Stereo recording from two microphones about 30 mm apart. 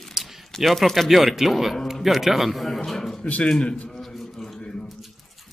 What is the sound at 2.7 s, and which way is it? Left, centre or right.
Speech, centre.